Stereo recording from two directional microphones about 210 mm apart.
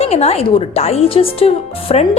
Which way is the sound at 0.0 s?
30° left (ahead or behind).